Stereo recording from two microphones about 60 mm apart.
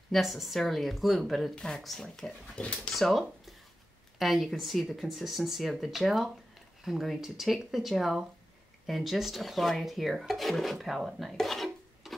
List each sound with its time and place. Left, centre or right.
0.1 s speech: centre
1.5 s speech: centre
2.6 s speech: left
2.9 s speech: centre
11.0 s a sound: centre